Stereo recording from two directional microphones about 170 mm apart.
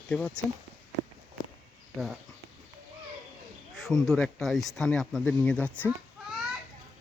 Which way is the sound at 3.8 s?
Centre (ahead or behind).